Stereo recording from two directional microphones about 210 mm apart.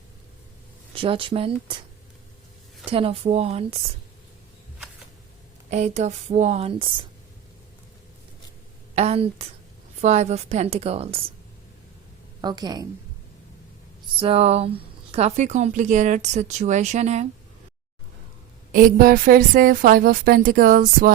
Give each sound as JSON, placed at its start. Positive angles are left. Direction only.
{"t": 0.9, "sound": "a woman's voice", "side_deg": -25}
{"t": 2.9, "sound": "a woman's voice", "side_deg": -25}
{"t": 5.7, "sound": "a woman's voice", "side_deg": -35}
{"t": 9.0, "sound": "a woman's voice", "side_deg": -30}
{"t": 12.4, "sound": "a woman's voice", "side_deg": -20}
{"t": 14.2, "sound": "a woman's voice", "side_deg": -30}
{"t": 18.7, "sound": "a woman's voice", "side_deg": -40}